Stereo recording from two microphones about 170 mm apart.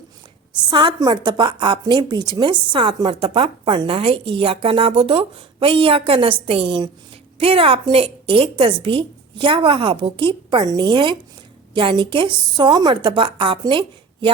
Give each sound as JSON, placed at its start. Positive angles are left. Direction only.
{"t": 0.7, "sound": "a woman's voice", "side_deg": -25}